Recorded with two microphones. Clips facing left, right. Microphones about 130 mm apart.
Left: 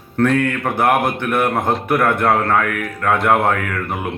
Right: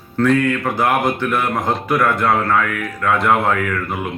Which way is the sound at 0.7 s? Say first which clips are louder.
Left 4 dB; 60° left (ahead or behind).